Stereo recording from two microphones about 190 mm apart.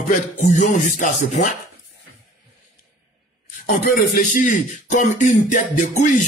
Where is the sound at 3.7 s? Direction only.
45° left (ahead or behind).